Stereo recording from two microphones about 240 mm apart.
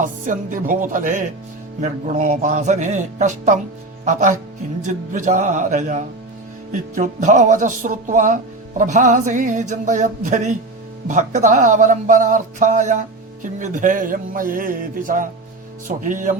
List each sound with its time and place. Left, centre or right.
0.0 s a man's voice: right